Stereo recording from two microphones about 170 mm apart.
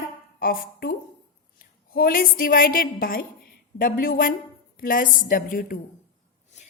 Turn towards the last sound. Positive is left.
turn(degrees=55)  # may be behind; listen again after turning